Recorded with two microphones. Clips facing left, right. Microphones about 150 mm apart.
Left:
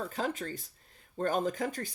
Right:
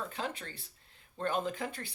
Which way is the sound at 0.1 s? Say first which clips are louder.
Left 5 dB; 40° left (ahead or behind).